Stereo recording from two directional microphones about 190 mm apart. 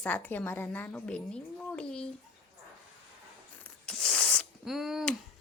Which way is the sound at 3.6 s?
5° left (ahead or behind).